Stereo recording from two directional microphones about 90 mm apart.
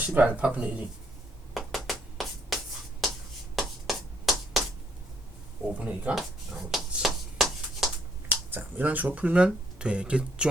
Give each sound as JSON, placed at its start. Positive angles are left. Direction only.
{"t": 0.0, "sound": "speech", "side_deg": -15}
{"t": 1.5, "sound": "finger snapping", "side_deg": 0}
{"t": 5.8, "sound": "speech", "side_deg": -15}
{"t": 6.1, "sound": "shuffle", "side_deg": 0}
{"t": 8.3, "sound": "speech", "side_deg": -20}